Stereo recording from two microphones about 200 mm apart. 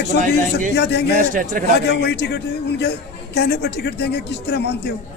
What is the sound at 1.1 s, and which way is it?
Speech, 45° right (ahead or behind).